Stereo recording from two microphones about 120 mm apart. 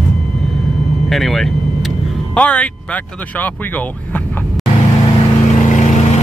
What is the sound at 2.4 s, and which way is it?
Speech, 10° left (ahead or behind).